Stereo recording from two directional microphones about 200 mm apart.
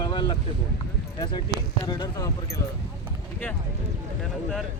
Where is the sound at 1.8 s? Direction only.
20° left (ahead or behind).